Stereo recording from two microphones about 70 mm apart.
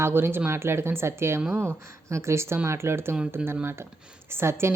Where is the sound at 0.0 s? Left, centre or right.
Right.